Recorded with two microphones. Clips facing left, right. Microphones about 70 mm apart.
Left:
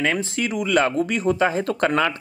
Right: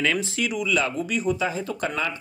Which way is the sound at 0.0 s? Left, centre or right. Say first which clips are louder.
Left 2 dB; left.